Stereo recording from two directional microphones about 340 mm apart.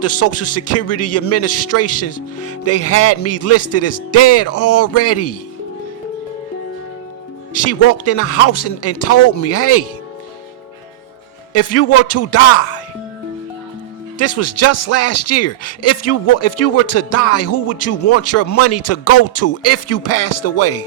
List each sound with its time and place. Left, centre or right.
0.0 s speech: left
7.5 s speech: left
11.5 s speech: left
14.2 s speech: left